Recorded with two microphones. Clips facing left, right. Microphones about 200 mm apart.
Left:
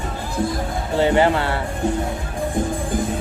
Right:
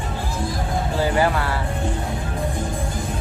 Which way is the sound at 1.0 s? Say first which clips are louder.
Left 5 dB; 25° left (ahead or behind).